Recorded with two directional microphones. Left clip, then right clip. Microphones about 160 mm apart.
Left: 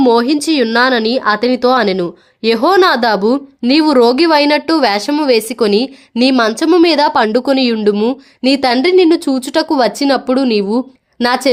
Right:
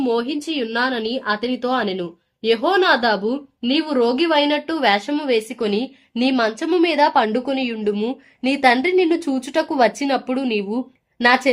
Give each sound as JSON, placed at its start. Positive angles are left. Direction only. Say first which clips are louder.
{"t": 0.0, "sound": "speech", "louder": "left 10 dB", "side_deg": 55}